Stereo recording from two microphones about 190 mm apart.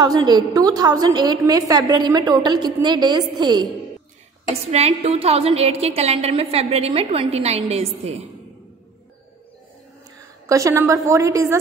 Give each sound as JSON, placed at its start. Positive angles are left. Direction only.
{"t": 0.0, "sound": "a woman's voice", "side_deg": -20}
{"t": 4.6, "sound": "a woman's voice", "side_deg": -35}
{"t": 10.1, "sound": "a woman's voice", "side_deg": -15}